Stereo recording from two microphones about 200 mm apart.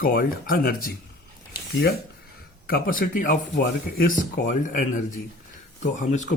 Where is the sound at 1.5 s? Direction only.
55° left (ahead or behind).